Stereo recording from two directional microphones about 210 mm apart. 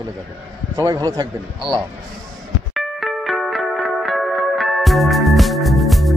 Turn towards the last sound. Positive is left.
turn(degrees=0)  # may be behind; listen again after turning